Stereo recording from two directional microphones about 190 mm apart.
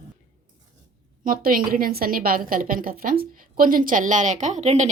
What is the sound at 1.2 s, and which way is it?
A woman's voice, 45° right (ahead or behind).